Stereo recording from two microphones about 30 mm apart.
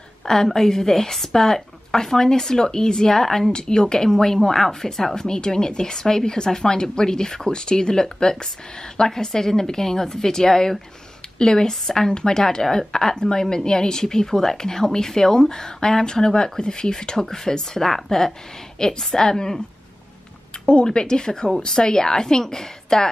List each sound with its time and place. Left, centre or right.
0.2 s a woman's voice: centre
3.5 s speech: left
11.3 s speech: left
20.6 s speech: left